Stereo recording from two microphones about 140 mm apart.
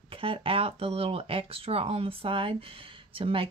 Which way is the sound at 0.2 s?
40° right (ahead or behind).